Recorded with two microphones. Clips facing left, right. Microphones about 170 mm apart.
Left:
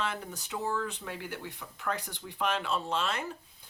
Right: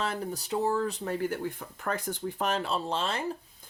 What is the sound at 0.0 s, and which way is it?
Speech, 35° right (ahead or behind).